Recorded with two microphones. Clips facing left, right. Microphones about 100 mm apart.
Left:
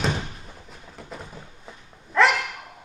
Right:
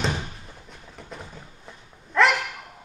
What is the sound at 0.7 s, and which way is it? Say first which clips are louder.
Dog: left 1 dB; centre (ahead or behind).